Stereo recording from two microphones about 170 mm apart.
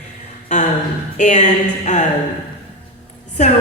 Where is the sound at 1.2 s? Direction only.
45° left (ahead or behind).